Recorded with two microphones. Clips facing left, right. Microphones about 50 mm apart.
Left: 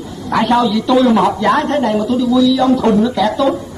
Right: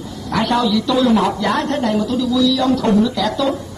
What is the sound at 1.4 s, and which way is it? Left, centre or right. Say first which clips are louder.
A man's voice: left 5 dB; left.